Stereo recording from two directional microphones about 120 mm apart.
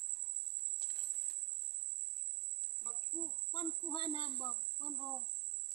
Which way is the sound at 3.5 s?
50° left (ahead or behind).